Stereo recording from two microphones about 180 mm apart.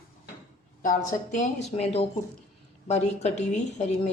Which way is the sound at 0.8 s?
45° left (ahead or behind).